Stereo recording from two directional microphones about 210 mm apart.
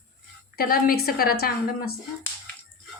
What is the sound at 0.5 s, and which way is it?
A woman's voice, 45° left (ahead or behind).